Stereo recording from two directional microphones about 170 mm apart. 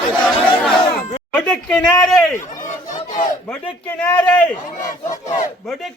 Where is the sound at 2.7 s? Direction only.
50° left (ahead or behind).